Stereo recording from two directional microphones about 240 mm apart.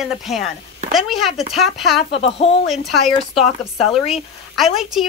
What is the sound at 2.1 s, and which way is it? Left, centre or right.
Speech, left.